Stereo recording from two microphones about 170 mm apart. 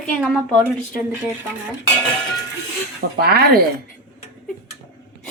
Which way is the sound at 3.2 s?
70° right (ahead or behind).